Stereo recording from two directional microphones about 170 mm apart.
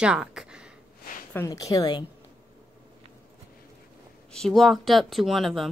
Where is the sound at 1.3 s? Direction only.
20° left (ahead or behind).